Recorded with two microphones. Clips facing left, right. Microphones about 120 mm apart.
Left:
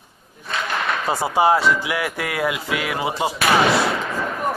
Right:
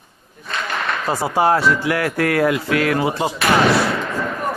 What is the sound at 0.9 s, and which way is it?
Speech, centre (ahead or behind).